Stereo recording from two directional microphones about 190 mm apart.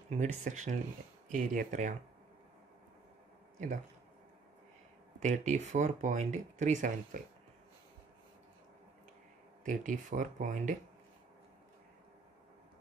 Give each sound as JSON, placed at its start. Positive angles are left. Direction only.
{"t": 0.1, "sound": "speech", "side_deg": -40}
{"t": 3.5, "sound": "speech", "side_deg": -40}
{"t": 5.2, "sound": "speech", "side_deg": -40}
{"t": 9.7, "sound": "speech", "side_deg": -45}